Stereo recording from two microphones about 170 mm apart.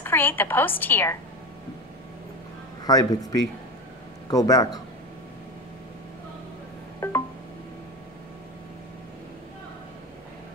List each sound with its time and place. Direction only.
0.0 s a woman's voice: 10° left (ahead or behind)
2.9 s speech: 20° left (ahead or behind)
7.0 s a sound: 15° left (ahead or behind)